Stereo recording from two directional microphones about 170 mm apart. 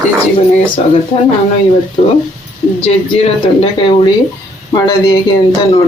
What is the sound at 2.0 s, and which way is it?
Speech, 40° left (ahead or behind).